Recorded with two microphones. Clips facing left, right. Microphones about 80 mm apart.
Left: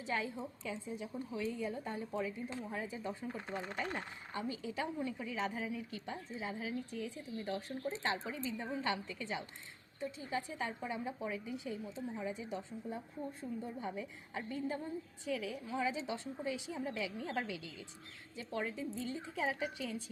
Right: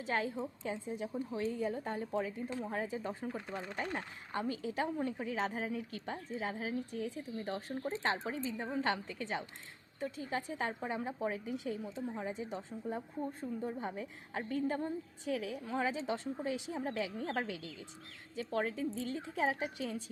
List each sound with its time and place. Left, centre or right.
0.0 s a woman's voice: right